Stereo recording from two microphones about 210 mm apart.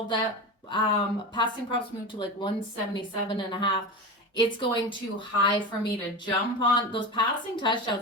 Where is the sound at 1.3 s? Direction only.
20° left (ahead or behind).